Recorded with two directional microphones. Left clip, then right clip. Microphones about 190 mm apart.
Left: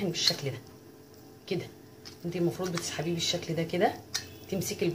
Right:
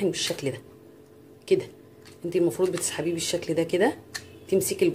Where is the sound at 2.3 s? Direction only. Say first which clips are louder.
Right 8 dB; 50° right (ahead or behind).